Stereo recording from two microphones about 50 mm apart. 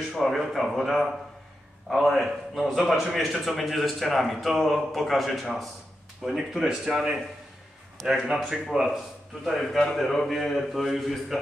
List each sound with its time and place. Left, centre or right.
0.2 s a man's voice: centre
8.3 s a man's voice: centre